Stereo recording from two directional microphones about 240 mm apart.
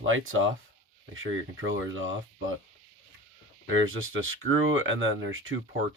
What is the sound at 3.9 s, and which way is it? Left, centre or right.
Speech, right.